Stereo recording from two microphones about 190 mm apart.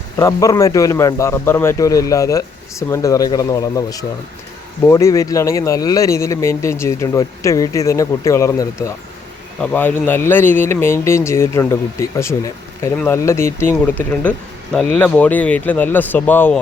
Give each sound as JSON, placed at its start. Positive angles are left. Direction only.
{"t": 0.2, "sound": "speech", "side_deg": 15}